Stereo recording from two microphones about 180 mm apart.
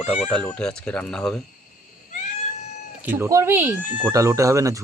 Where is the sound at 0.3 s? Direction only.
5° left (ahead or behind).